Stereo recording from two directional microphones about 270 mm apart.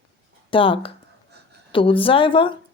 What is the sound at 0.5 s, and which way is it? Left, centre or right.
Speech, centre.